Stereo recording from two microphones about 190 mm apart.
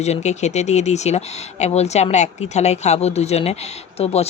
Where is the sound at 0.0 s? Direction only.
35° left (ahead or behind).